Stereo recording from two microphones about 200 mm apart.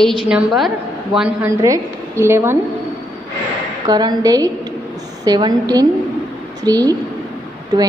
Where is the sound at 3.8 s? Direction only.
20° right (ahead or behind).